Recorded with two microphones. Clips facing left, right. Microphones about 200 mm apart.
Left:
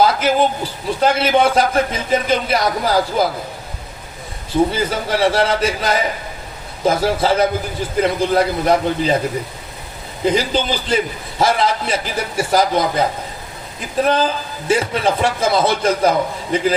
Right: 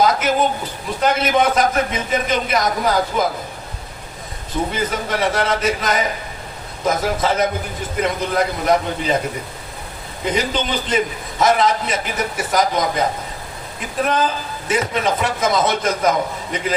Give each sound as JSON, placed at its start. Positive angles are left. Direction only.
{"t": 0.0, "sound": "a man's voice", "side_deg": 30}
{"t": 4.7, "sound": "a man's voice", "side_deg": 30}
{"t": 10.2, "sound": "a man's voice", "side_deg": 30}